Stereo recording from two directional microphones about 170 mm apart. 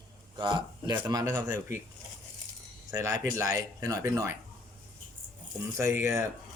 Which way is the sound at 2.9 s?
20° right (ahead or behind).